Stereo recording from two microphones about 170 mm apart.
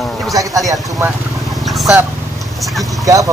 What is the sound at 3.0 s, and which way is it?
Speech, 20° right (ahead or behind).